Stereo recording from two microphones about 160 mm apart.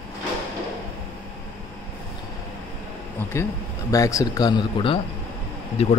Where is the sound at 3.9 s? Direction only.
20° left (ahead or behind).